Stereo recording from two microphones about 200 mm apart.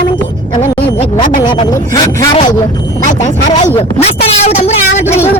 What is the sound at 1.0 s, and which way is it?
Speech, 40° left (ahead or behind).